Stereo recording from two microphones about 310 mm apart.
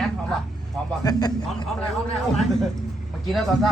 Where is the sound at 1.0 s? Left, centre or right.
Centre.